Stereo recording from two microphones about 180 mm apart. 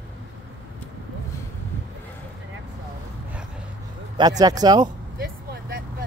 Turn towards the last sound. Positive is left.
turn(degrees=-55)  # may be behind; listen again after turning